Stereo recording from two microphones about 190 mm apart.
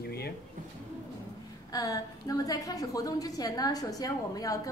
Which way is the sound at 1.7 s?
20° left (ahead or behind).